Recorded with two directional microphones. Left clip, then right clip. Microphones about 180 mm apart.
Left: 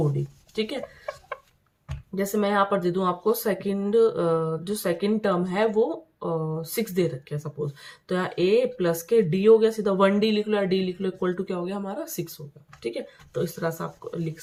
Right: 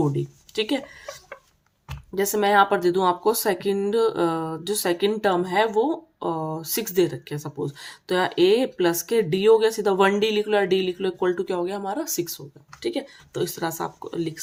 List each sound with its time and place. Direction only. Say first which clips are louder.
0.5 s speech: right 4 dB; 35° right (ahead or behind)
2.1 s speech: right 5 dB; 40° right (ahead or behind)